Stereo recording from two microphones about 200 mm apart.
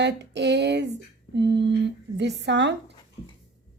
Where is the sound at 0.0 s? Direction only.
60° right (ahead or behind).